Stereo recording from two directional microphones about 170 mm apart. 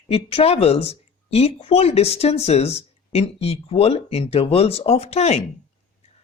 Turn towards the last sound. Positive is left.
turn(degrees=40)  # may be behind; listen again after turning